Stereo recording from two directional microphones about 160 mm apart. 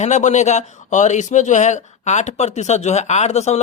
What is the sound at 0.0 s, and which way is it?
Speech, 45° left (ahead or behind).